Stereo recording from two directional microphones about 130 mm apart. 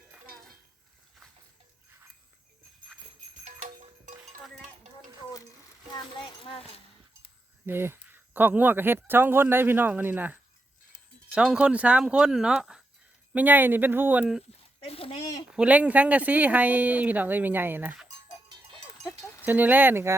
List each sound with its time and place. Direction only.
3.4 s music: 70° right (ahead or behind)
5.9 s a sound: 40° left (ahead or behind)
7.7 s speech: 15° right (ahead or behind)
14.8 s a sound: 50° left (ahead or behind)
15.5 s speech: 10° right (ahead or behind)
19.5 s speech: 15° right (ahead or behind)